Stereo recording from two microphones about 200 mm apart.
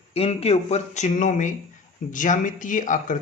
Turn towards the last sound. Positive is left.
turn(degrees=40)  # may be behind; listen again after turning